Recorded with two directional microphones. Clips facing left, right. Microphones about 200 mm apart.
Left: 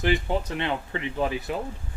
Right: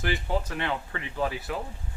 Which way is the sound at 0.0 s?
20° left (ahead or behind).